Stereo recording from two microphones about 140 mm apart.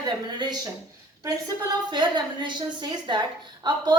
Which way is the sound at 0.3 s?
30° right (ahead or behind).